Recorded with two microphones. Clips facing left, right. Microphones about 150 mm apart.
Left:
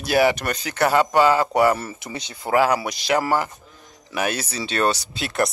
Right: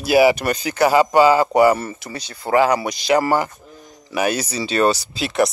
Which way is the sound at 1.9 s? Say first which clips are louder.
Right 1 dB; 20° left (ahead or behind).